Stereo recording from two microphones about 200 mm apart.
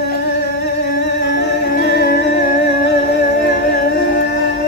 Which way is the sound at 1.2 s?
55° left (ahead or behind).